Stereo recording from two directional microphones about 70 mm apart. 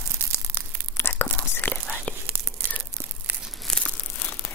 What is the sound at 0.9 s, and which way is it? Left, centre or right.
Whispering, left.